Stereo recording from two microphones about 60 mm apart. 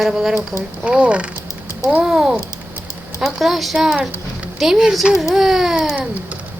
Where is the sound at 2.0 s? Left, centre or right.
Centre.